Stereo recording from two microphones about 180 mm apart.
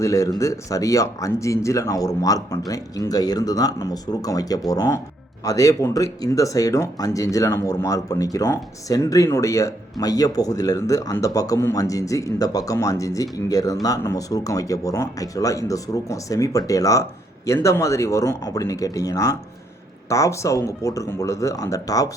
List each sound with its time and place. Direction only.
0.0 s speech: 20° left (ahead or behind)